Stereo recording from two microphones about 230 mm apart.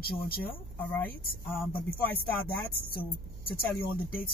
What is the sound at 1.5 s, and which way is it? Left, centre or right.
Speech, centre.